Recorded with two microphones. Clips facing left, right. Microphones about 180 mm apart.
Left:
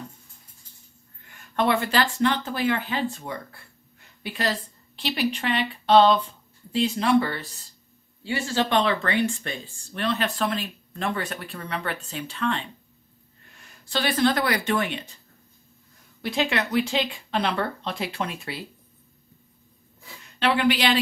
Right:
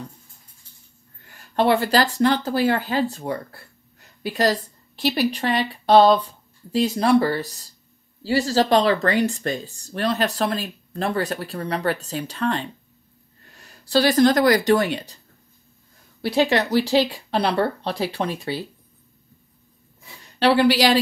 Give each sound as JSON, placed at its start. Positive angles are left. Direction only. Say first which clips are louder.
{"t": 1.2, "sound": "a woman's voice", "louder": "right 4 dB", "side_deg": -35}
{"t": 16.2, "sound": "speech", "louder": "right 6 dB", "side_deg": -35}
{"t": 20.3, "sound": "speech", "louder": "right 5 dB", "side_deg": -35}